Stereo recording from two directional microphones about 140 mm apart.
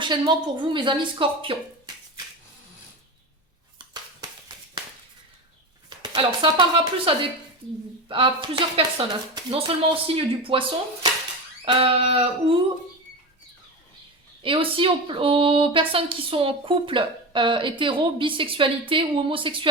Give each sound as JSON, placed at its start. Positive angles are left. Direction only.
{"t": 0.0, "sound": "speech", "side_deg": -35}
{"t": 3.8, "sound": "a sound", "side_deg": -30}
{"t": 6.0, "sound": "speech", "side_deg": -35}
{"t": 14.4, "sound": "speech", "side_deg": -40}